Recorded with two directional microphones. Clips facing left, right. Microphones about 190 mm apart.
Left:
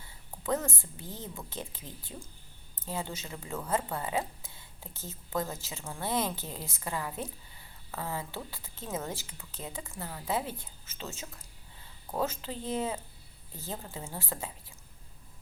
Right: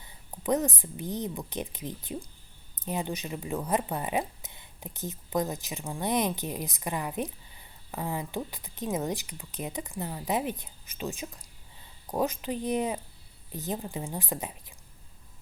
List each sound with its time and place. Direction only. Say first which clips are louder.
0.0 s speech: right 4 dB; 20° right (ahead or behind)